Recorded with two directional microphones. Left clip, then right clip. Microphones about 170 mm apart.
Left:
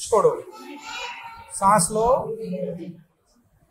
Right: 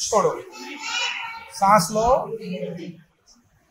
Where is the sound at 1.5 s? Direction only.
40° left (ahead or behind).